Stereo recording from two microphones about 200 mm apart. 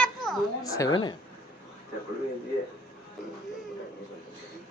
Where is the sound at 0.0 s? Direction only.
Centre (ahead or behind).